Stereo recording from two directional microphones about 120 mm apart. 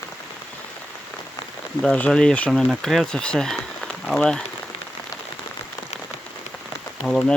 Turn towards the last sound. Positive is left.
turn(degrees=5)  # may be behind; listen again after turning